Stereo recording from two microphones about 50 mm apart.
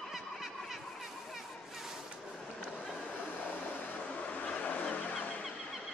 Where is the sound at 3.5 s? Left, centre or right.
Left.